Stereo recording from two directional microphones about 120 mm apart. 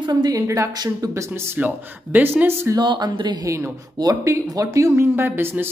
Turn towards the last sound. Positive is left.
turn(degrees=-20)  # may be behind; listen again after turning